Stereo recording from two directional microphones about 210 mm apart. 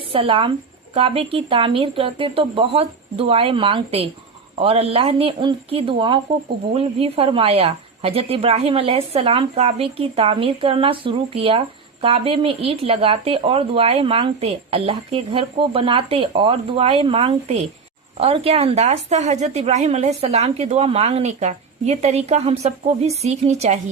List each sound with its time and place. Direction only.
0.1 s a woman's voice: 25° right (ahead or behind)